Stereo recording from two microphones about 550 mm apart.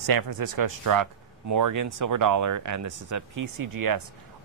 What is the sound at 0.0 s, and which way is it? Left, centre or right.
Speech, right.